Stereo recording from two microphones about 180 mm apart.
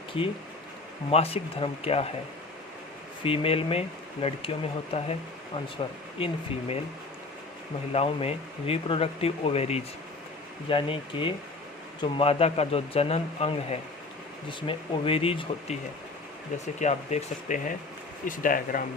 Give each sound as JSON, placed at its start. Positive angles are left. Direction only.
{"t": 0.1, "sound": "speech", "side_deg": 30}
{"t": 3.2, "sound": "speech", "side_deg": 30}
{"t": 5.8, "sound": "speech", "side_deg": 30}
{"t": 7.9, "sound": "speech", "side_deg": 35}
{"t": 16.8, "sound": "speech", "side_deg": 40}